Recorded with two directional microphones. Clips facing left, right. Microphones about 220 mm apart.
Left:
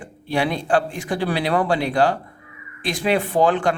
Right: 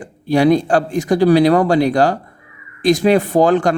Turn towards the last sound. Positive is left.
turn(degrees=-40)  # may be behind; listen again after turning